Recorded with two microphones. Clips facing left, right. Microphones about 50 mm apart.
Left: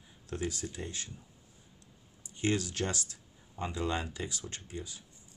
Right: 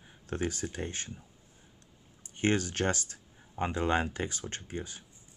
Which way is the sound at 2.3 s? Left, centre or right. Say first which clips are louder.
Right 3 dB; right.